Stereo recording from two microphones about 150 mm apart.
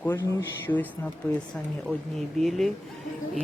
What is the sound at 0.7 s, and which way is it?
Speech, 10° left (ahead or behind).